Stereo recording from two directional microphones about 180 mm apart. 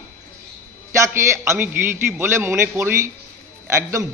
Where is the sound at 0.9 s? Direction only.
15° right (ahead or behind).